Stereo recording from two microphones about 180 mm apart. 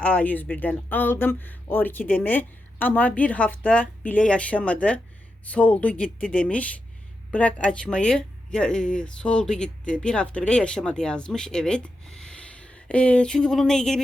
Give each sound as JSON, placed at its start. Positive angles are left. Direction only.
{"t": 0.0, "sound": "speech", "side_deg": 10}